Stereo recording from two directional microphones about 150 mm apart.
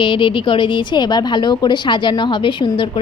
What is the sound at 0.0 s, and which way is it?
A woman's voice, 35° left (ahead or behind).